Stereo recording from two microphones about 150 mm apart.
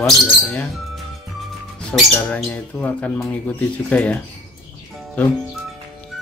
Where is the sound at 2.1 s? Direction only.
10° left (ahead or behind).